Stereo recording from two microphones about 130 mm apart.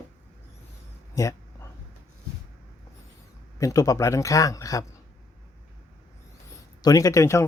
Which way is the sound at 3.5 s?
25° left (ahead or behind).